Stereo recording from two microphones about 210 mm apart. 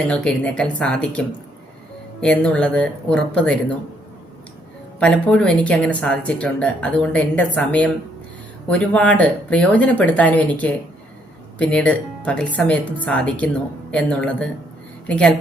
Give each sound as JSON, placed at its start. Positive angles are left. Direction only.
{"t": 0.1, "sound": "speech", "side_deg": 5}
{"t": 2.2, "sound": "speech", "side_deg": 5}
{"t": 4.9, "sound": "speech", "side_deg": 5}